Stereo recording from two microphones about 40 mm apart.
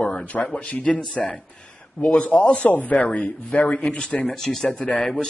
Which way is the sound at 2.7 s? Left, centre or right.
Left.